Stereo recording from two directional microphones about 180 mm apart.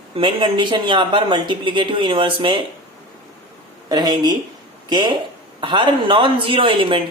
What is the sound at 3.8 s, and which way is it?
Speech, 20° right (ahead or behind).